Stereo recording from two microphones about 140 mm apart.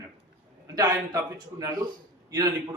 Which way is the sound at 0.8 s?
25° right (ahead or behind).